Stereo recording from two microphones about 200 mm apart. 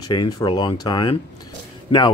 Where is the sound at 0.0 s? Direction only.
20° left (ahead or behind).